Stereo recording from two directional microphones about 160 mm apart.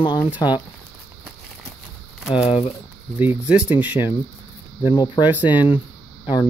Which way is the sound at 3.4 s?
5° right (ahead or behind).